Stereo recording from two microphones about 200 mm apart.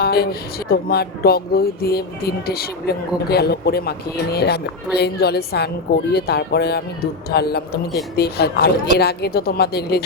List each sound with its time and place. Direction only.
0.0 s speech: 50° left (ahead or behind)